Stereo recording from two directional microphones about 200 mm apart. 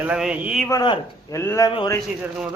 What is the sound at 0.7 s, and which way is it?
Speech, 20° left (ahead or behind).